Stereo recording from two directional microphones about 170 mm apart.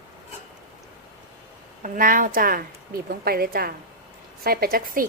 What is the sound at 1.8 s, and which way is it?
A woman's voice, 55° right (ahead or behind).